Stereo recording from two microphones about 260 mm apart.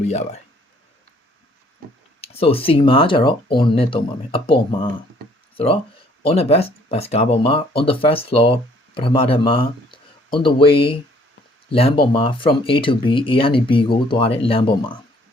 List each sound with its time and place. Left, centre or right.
0.0 s speech: left
2.2 s speech: left